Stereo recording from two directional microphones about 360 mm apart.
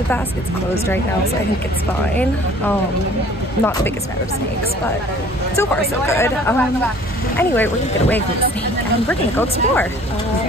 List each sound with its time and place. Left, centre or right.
5.6 s speech: centre